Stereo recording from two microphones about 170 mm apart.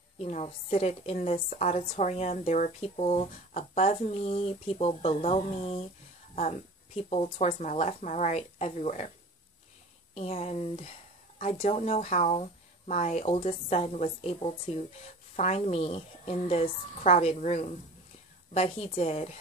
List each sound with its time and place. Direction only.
0.2 s a woman's voice: 40° left (ahead or behind)
10.1 s a woman's voice: 35° left (ahead or behind)